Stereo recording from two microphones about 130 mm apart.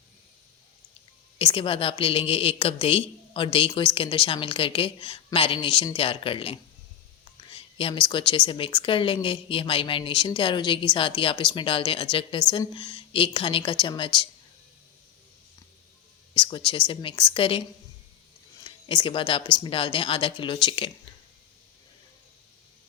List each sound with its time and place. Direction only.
1.4 s a woman's voice: 45° left (ahead or behind)
16.3 s speech: 40° left (ahead or behind)
18.6 s speech: 40° left (ahead or behind)